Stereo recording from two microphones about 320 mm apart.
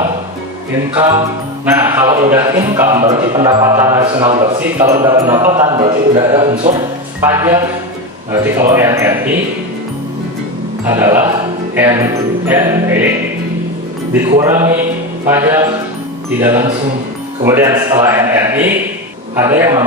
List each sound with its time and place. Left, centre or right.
1.8 s a man's voice: centre
10.9 s a man's voice: centre
14.3 s a man's voice: centre